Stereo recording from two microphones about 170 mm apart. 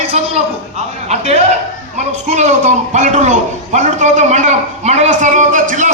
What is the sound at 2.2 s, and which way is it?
A man's voice, 45° right (ahead or behind).